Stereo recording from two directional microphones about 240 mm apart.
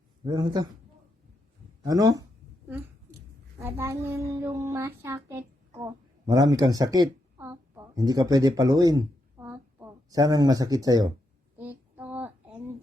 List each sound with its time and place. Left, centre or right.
0.3 s a man's voice: centre
1.8 s a man's voice: centre
3.6 s speech: centre
11.5 s a sound: centre